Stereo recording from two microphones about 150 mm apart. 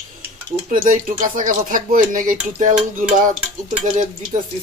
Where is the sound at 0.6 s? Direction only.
65° right (ahead or behind).